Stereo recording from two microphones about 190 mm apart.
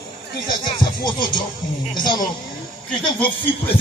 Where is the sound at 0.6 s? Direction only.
25° left (ahead or behind).